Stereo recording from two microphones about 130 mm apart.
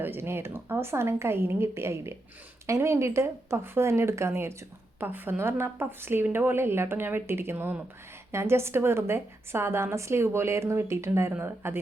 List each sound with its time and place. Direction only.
0.0 s a woman's voice: 15° right (ahead or behind)